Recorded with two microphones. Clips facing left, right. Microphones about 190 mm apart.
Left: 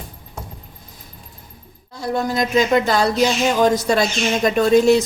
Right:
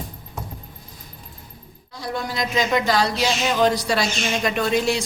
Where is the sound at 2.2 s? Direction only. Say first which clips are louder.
Left 6 dB; 45° left (ahead or behind).